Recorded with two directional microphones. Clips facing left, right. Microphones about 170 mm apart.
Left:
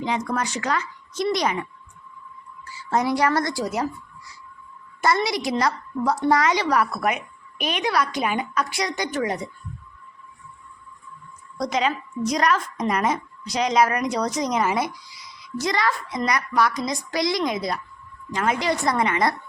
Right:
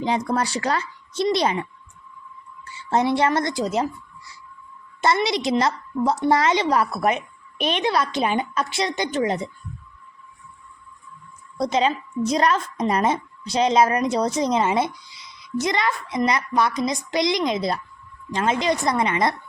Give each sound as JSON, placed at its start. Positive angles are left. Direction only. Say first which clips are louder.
{"t": 0.0, "sound": "speech", "louder": "right 3 dB", "side_deg": -30}
{"t": 2.6, "sound": "a woman's voice", "louder": "right 2 dB", "side_deg": -25}
{"t": 4.9, "sound": "speech", "louder": "right 1 dB", "side_deg": -25}
{"t": 11.5, "sound": "speech", "louder": "right 3 dB", "side_deg": -25}